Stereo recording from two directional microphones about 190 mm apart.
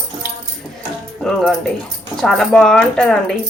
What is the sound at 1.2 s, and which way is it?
Speech, centre (ahead or behind).